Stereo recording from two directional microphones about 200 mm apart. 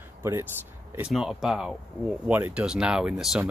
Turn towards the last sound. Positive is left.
turn(degrees=-5)  # may be behind; listen again after turning